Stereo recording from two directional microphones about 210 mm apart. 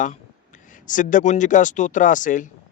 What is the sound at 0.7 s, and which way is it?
Speech, 40° left (ahead or behind).